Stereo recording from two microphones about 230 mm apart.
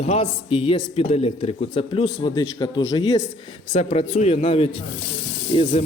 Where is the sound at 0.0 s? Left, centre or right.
Left.